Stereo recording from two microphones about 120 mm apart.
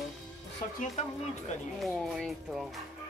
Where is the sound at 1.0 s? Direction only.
75° left (ahead or behind).